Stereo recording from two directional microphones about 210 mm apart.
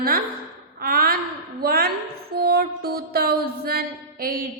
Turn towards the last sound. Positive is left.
turn(degrees=-45)  # may be behind; listen again after turning